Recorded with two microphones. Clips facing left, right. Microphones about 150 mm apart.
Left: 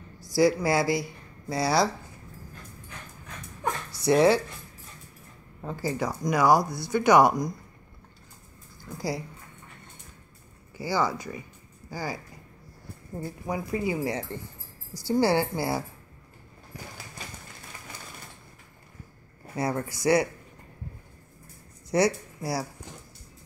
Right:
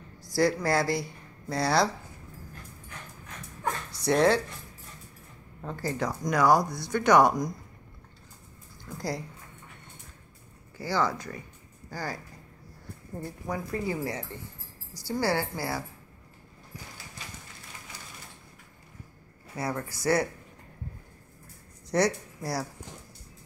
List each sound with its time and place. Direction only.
0.3 s speech: 10° left (ahead or behind)
3.9 s speech: 5° left (ahead or behind)
5.6 s speech: 5° left (ahead or behind)
8.9 s speech: 5° left (ahead or behind)
10.8 s speech: 10° left (ahead or behind)
13.2 s a woman's voice: 10° left (ahead or behind)
19.5 s a woman's voice: 20° left (ahead or behind)
21.9 s speech: 10° left (ahead or behind)